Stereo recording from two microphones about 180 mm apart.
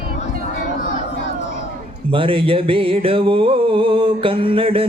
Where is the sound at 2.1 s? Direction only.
30° right (ahead or behind).